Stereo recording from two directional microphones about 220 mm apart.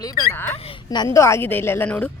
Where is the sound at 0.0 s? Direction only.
15° left (ahead or behind).